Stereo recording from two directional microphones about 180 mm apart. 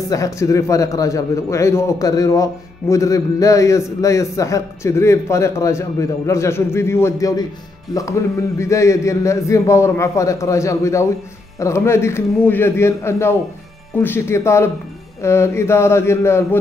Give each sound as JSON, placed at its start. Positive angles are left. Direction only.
{"t": 0.1, "sound": "a man's voice", "side_deg": 15}